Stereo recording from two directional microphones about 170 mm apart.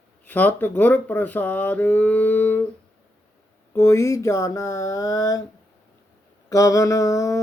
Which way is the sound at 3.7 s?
15° left (ahead or behind).